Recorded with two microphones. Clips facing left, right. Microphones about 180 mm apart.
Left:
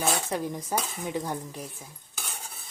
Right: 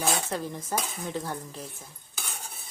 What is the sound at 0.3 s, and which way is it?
Speech, 15° left (ahead or behind).